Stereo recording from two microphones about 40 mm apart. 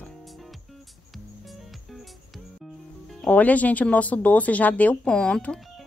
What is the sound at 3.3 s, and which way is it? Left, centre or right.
A woman's voice, left.